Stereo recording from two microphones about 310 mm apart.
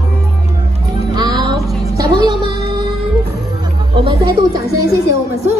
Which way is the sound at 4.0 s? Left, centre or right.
Centre.